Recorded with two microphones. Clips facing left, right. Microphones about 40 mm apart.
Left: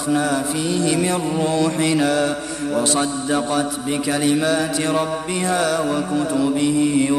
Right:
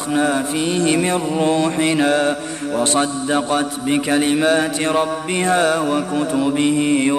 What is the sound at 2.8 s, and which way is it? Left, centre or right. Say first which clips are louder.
Speech: right 2 dB; right.